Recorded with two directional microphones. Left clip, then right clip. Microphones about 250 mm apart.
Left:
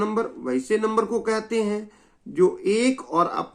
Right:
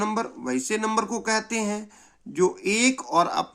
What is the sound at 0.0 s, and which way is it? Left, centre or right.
Speech, right.